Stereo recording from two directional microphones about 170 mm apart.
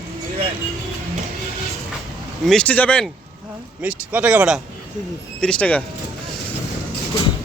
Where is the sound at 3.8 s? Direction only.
10° right (ahead or behind).